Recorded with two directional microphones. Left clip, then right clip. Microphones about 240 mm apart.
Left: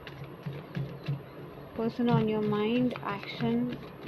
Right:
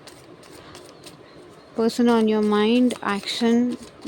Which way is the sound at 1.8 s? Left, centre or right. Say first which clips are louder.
Right 10 dB; right.